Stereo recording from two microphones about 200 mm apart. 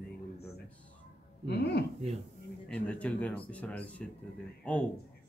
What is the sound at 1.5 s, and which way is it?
Speech, 60° left (ahead or behind).